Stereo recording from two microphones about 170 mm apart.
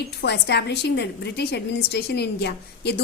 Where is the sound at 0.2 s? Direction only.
80° left.